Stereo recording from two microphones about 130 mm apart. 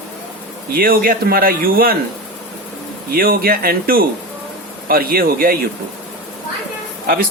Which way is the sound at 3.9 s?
90° right.